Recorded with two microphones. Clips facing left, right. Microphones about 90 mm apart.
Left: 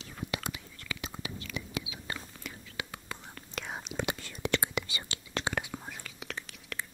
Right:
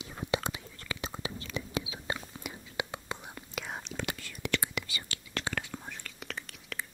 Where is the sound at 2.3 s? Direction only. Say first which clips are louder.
Right 4 dB; 20° right (ahead or behind).